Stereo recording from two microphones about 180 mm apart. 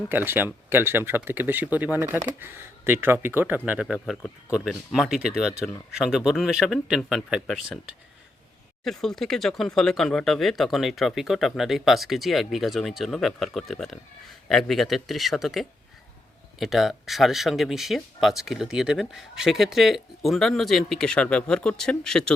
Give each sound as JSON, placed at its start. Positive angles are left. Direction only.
{"t": 0.1, "sound": "speech", "side_deg": -10}
{"t": 8.8, "sound": "speech", "side_deg": 0}